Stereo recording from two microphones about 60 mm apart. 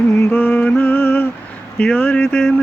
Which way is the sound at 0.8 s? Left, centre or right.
Left.